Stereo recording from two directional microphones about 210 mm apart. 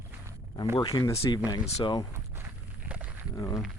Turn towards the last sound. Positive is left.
turn(degrees=15)  # may be behind; listen again after turning